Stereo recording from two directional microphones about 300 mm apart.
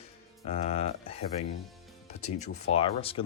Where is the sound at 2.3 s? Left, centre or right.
Left.